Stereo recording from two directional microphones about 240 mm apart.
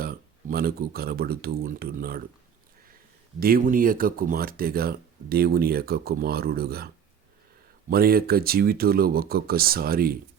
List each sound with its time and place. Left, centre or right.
0.0 s speech: right
3.4 s speech: right